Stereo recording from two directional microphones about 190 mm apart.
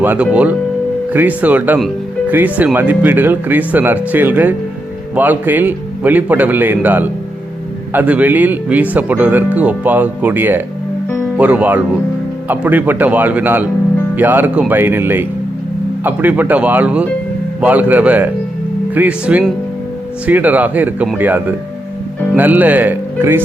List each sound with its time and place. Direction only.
0.0 s speech: 10° right (ahead or behind)